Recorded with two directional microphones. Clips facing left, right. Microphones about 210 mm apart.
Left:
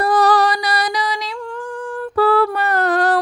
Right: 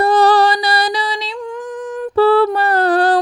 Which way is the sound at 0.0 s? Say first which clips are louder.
Right 3 dB; 25° right (ahead or behind).